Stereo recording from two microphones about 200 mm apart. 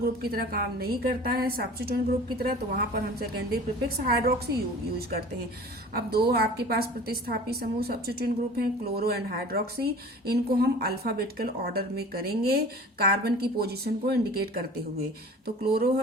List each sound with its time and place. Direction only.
0.0 s a woman's voice: 50° right (ahead or behind)
15.4 s a woman's voice: 50° right (ahead or behind)